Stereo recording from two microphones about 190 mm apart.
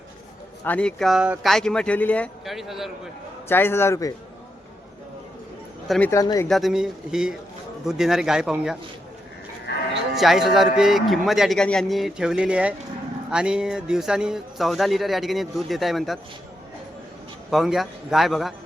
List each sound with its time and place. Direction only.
0.6 s speech: 5° left (ahead or behind)
3.5 s a man's voice: 10° left (ahead or behind)
5.9 s a man's voice: 10° left (ahead or behind)
6.5 s speech: centre (ahead or behind)
9.7 s cattle: 65° left (ahead or behind)
10.2 s speech: centre (ahead or behind)
17.5 s speech: centre (ahead or behind)